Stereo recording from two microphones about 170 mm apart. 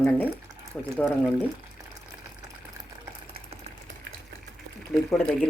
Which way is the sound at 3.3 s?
35° right (ahead or behind).